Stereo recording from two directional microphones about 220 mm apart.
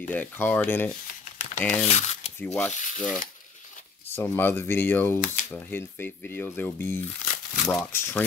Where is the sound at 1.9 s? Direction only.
30° left (ahead or behind).